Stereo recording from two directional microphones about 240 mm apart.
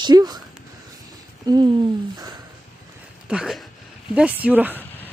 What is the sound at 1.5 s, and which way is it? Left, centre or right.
Speech, centre.